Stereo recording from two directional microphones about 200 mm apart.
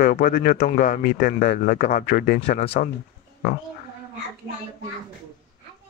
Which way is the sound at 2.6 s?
30° left (ahead or behind).